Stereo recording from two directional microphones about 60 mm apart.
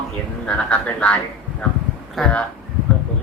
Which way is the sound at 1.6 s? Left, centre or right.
Centre.